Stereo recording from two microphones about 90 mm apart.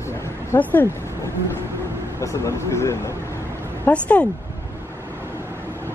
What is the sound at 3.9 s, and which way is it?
Speech, 15° left (ahead or behind).